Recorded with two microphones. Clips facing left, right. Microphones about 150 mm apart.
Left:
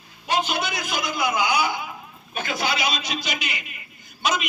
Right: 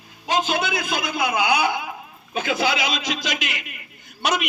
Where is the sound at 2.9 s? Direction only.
90° right; by 4.5 s 65° right (ahead or behind).